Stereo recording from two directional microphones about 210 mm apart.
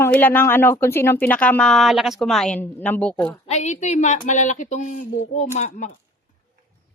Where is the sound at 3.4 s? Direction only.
35° left (ahead or behind).